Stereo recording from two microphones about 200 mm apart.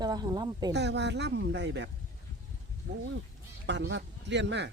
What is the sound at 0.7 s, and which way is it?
Speech, 60° right (ahead or behind).